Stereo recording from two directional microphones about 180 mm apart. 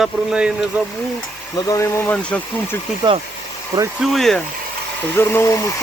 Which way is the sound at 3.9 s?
Centre (ahead or behind).